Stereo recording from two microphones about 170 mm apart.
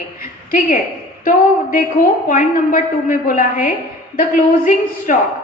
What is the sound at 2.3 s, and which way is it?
A woman's voice, 50° left (ahead or behind).